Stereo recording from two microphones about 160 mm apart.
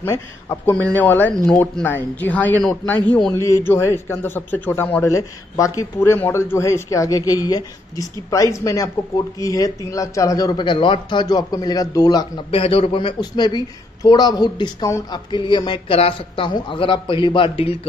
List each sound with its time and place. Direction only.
0.0 s a man's voice: 15° left (ahead or behind); by 17.7 s 35° left (ahead or behind)